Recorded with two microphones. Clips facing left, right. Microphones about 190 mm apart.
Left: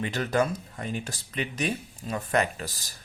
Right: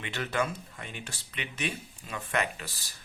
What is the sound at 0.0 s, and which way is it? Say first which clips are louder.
Speech: left 6 dB; 40° left (ahead or behind).